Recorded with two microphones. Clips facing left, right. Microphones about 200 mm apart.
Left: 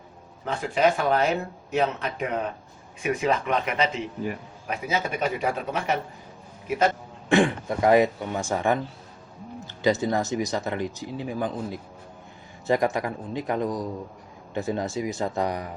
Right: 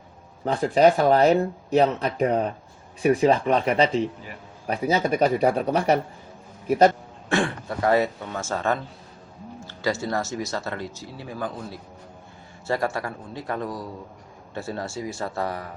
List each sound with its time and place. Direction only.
0.4 s a man's voice: 35° right (ahead or behind)
7.3 s speech: 15° left (ahead or behind)